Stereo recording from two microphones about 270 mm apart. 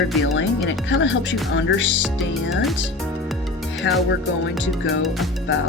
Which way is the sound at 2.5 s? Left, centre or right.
Centre.